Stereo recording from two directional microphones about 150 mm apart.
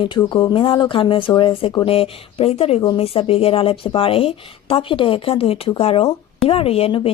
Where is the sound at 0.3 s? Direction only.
30° left (ahead or behind).